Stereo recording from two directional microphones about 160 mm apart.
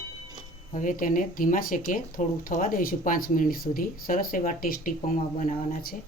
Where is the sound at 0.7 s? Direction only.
55° left (ahead or behind).